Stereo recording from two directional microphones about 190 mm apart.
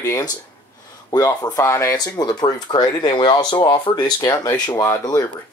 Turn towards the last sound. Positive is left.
turn(degrees=15)  # may be behind; listen again after turning